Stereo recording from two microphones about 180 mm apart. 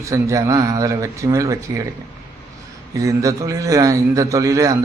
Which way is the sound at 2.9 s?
15° right (ahead or behind).